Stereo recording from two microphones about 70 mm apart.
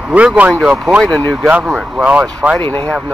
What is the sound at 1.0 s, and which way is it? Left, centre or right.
Speech, centre.